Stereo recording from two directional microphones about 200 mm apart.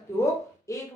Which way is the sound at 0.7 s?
15° left (ahead or behind).